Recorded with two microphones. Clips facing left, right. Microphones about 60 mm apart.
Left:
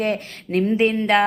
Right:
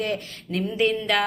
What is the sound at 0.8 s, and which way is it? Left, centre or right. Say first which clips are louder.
Speech: left 3 dB; left.